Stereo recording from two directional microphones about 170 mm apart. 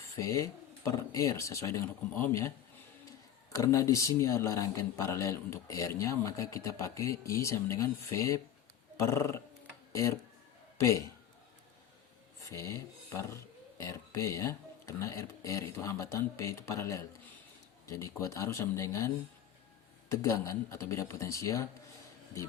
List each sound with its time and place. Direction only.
0.2 s speech: 20° left (ahead or behind)
3.5 s a man's voice: 20° left (ahead or behind)
12.5 s speech: 15° left (ahead or behind)